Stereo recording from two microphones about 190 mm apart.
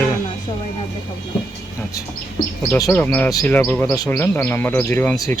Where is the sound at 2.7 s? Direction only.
20° left (ahead or behind).